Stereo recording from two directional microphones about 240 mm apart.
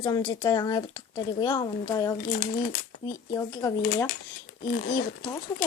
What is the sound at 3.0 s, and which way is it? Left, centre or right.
A child's voice, centre.